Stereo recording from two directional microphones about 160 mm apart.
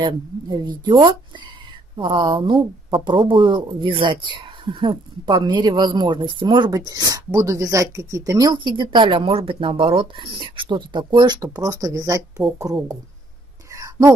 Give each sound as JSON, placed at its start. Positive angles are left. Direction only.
{"t": 0.0, "sound": "speech", "side_deg": -30}
{"t": 13.7, "sound": "whispering", "side_deg": -20}